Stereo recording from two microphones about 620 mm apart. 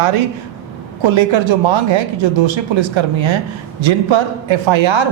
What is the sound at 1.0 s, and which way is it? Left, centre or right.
Speech, right.